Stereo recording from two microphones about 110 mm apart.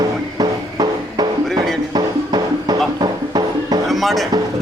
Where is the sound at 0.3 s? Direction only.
40° right (ahead or behind).